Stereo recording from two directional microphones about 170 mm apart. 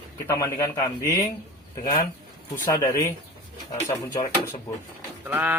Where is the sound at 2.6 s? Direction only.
25° left (ahead or behind).